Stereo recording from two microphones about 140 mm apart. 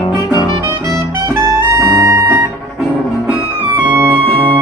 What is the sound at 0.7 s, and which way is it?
Music, 20° right (ahead or behind).